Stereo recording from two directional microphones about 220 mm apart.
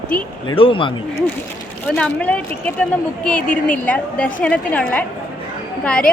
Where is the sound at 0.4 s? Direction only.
25° left (ahead or behind).